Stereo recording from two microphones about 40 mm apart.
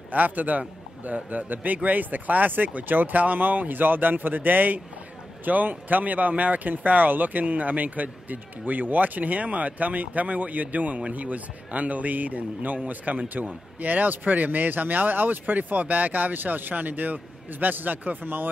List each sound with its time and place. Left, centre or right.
0.1 s a man's voice: right